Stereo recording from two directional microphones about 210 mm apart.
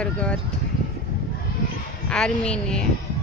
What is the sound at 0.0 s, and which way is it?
Speech, 5° left (ahead or behind).